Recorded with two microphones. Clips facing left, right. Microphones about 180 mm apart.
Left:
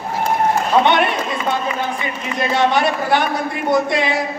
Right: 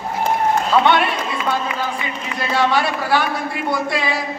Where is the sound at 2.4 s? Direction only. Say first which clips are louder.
Left 2 dB; 20° left (ahead or behind).